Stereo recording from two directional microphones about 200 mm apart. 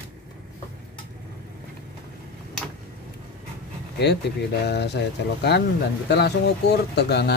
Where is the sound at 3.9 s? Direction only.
55° left (ahead or behind).